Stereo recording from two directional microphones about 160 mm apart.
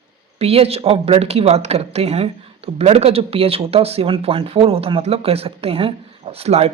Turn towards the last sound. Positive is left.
turn(degrees=-40)  # may be behind; listen again after turning